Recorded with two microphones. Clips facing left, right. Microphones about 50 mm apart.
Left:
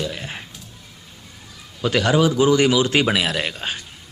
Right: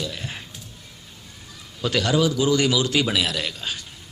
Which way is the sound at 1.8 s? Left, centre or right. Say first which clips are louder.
Left 3 dB; centre.